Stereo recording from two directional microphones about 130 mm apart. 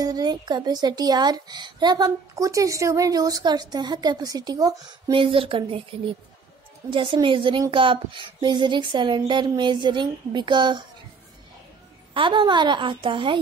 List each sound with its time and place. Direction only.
0.0 s a woman's voice: 30° right (ahead or behind)
5.1 s a woman's voice: 40° right (ahead or behind)
12.1 s a woman's voice: 40° right (ahead or behind)